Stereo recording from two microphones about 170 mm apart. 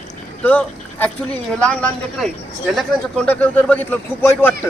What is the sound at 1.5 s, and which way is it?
A man's voice, 5° left (ahead or behind).